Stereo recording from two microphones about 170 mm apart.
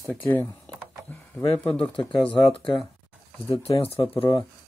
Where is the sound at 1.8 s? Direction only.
30° left (ahead or behind).